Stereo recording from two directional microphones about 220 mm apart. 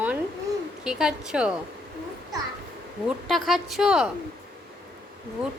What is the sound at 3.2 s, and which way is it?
Speech, centre (ahead or behind).